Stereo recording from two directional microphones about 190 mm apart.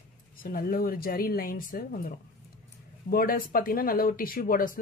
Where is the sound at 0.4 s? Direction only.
50° left (ahead or behind).